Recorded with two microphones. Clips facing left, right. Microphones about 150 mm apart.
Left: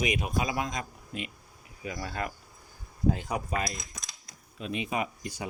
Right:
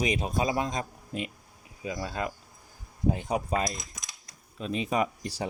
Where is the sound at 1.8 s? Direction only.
20° right (ahead or behind).